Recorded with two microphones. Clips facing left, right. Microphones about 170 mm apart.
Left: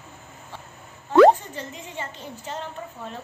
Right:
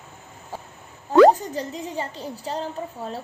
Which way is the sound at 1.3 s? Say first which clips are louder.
Right 7 dB; 40° right (ahead or behind).